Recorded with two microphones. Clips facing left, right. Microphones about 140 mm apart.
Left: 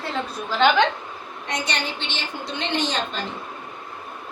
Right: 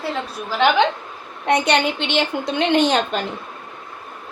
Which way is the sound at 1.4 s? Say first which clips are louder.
Right 11 dB; 60° right (ahead or behind).